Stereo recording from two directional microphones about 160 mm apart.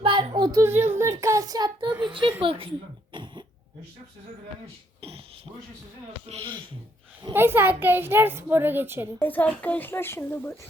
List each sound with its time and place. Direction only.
0.0 s a child's voice: 30° right (ahead or behind)
2.4 s a sound: 35° right (ahead or behind)
4.9 s a sound: 35° right (ahead or behind)
6.2 s speech: 35° right (ahead or behind)
7.3 s a woman's voice: 15° right (ahead or behind)
9.1 s a child's voice: 10° left (ahead or behind)